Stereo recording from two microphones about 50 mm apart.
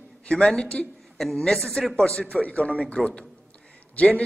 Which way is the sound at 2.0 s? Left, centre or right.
Left.